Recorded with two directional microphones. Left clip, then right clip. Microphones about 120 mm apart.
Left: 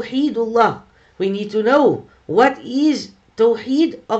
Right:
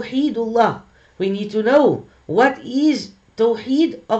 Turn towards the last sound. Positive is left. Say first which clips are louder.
# left 2 dB
turn(degrees=5)  # may be behind; listen again after turning